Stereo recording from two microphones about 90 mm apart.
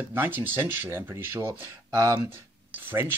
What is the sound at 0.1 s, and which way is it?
Speech, 25° right (ahead or behind).